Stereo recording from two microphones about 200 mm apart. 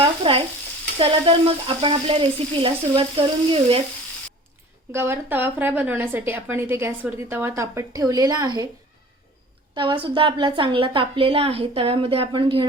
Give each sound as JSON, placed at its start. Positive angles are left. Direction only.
{"t": 0.0, "sound": "stir", "side_deg": -30}
{"t": 0.9, "sound": "a woman's voice", "side_deg": -25}
{"t": 4.9, "sound": "a woman's voice", "side_deg": -10}
{"t": 9.7, "sound": "a woman's voice", "side_deg": -25}